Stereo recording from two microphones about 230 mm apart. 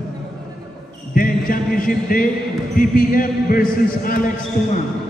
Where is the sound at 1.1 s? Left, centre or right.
Left.